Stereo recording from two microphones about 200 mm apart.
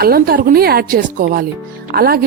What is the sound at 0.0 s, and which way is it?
Speech, 50° right (ahead or behind).